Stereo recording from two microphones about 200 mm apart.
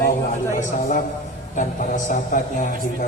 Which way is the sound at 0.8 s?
40° left (ahead or behind).